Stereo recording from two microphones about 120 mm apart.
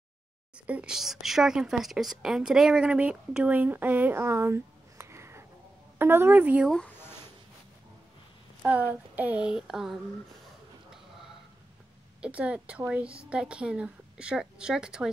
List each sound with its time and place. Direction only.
0.7 s a woman's voice: 10° right (ahead or behind)
8.6 s a woman's voice: 15° right (ahead or behind)
12.2 s a woman's voice: 10° right (ahead or behind)